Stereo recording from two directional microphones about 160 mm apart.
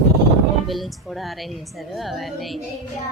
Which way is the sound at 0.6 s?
Centre (ahead or behind).